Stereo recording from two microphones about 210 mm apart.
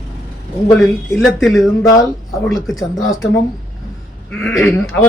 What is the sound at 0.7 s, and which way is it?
Speech, centre (ahead or behind).